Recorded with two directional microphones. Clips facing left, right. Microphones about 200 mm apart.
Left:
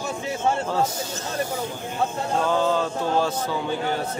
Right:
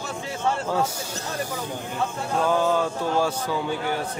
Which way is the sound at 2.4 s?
10° right (ahead or behind).